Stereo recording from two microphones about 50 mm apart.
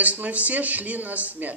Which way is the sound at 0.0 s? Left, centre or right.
Right.